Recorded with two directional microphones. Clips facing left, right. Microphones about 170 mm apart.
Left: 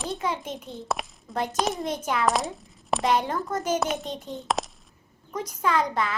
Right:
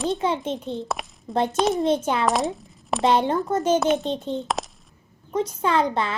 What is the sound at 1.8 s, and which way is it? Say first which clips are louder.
Speech: right 7 dB; 30° right (ahead or behind).